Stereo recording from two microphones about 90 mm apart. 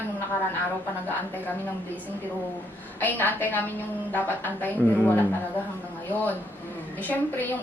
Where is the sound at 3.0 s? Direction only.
20° left (ahead or behind).